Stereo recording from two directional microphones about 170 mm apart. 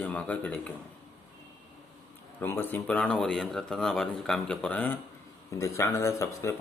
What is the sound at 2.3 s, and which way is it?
A man's voice, 15° left (ahead or behind).